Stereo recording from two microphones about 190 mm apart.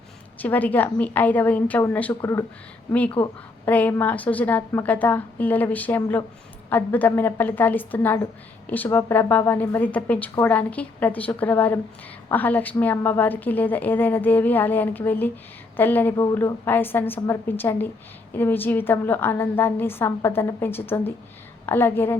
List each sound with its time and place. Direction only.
0.3 s a woman's voice: 10° left (ahead or behind)
3.2 s a woman's voice: 30° left (ahead or behind)
3.7 s a woman's voice: 10° left (ahead or behind)